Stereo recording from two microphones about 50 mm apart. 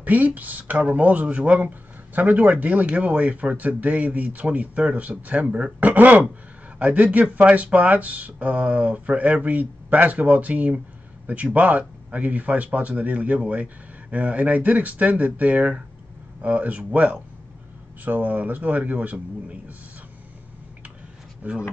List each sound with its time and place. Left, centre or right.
0.0 s speech: right
21.4 s speech: right